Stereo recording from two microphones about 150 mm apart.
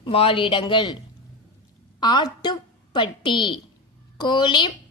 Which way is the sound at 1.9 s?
30° left (ahead or behind).